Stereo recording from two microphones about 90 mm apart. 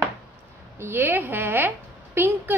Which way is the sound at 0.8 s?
25° right (ahead or behind).